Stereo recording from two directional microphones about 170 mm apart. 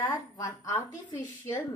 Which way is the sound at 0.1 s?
20° left (ahead or behind).